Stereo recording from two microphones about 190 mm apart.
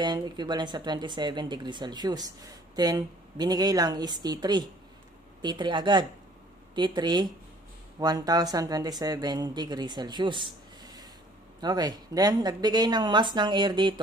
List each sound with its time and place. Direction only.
0.0 s speech: 25° right (ahead or behind)